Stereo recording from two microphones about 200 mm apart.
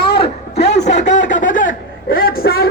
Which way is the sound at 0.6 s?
60° left (ahead or behind).